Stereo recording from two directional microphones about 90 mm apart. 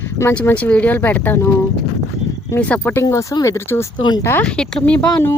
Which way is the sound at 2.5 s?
20° left (ahead or behind).